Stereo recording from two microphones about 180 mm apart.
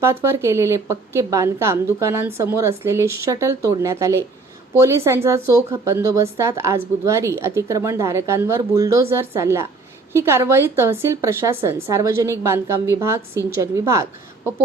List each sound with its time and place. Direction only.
0.0 s a woman's voice: 15° right (ahead or behind)